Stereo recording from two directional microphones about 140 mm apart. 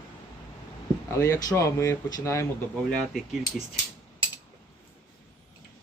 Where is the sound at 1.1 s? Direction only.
20° left (ahead or behind).